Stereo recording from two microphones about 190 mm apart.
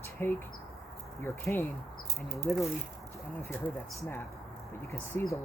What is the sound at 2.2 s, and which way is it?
Speech, centre (ahead or behind).